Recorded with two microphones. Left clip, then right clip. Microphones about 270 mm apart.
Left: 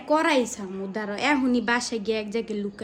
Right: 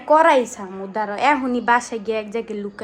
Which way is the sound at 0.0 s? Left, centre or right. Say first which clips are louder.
Right 8 dB; centre.